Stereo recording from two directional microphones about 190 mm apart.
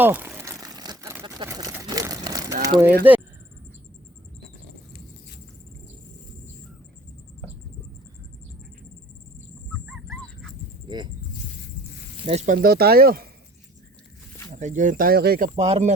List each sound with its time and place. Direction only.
0.0 s a sound: 10° right (ahead or behind)
3.1 s speech: 10° right (ahead or behind)
9.8 s dog: 5° right (ahead or behind)
10.8 s a sound: 25° right (ahead or behind)
12.2 s snake: 35° right (ahead or behind)
12.6 s speech: 55° right (ahead or behind)
14.5 s speech: 40° right (ahead or behind)
15.5 s speech: 35° right (ahead or behind)